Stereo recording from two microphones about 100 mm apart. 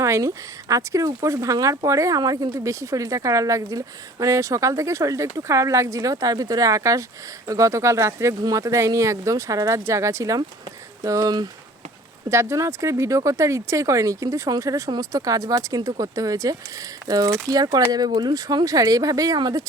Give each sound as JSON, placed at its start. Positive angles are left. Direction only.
{"t": 0.0, "sound": "speech", "side_deg": -30}